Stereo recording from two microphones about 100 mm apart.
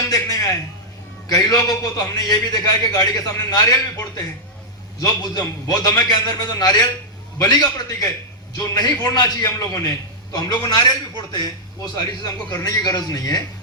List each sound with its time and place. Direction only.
0.1 s a sound: 35° left (ahead or behind)
1.3 s a man's voice: 35° left (ahead or behind)
4.9 s a man's voice: 40° left (ahead or behind)